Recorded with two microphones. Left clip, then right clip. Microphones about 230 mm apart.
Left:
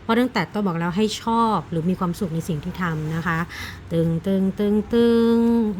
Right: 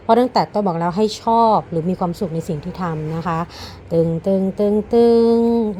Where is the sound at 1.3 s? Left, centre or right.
Left.